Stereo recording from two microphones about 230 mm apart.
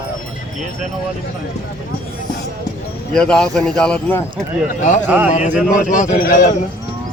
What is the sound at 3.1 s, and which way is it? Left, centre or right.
Speech, centre.